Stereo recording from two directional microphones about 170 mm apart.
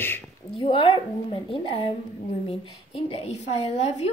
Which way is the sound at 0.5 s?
30° left (ahead or behind).